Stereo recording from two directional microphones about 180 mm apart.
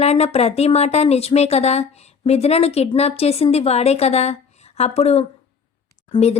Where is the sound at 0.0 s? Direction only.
35° left (ahead or behind).